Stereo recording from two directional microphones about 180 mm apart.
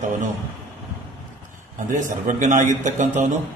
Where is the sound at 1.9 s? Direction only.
45° right (ahead or behind).